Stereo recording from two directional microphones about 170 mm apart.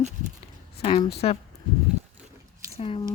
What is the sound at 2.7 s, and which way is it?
Squish, 35° left (ahead or behind).